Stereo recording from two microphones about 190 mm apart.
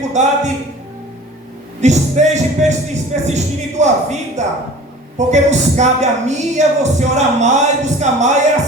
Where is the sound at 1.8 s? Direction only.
40° right (ahead or behind).